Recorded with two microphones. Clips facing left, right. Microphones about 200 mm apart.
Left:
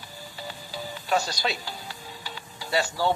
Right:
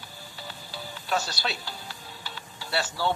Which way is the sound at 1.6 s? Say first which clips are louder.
Left 2 dB; 40° left (ahead or behind).